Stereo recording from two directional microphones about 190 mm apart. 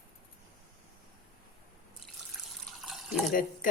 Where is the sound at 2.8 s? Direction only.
Centre (ahead or behind).